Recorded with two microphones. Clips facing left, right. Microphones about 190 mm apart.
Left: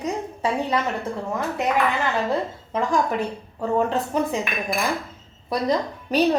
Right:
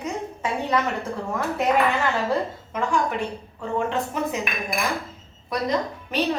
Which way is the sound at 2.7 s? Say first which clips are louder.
Left 2 dB; 35° left (ahead or behind).